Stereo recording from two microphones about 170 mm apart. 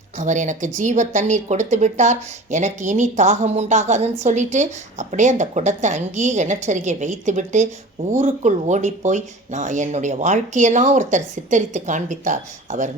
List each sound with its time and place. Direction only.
0.2 s speech: 45° right (ahead or behind)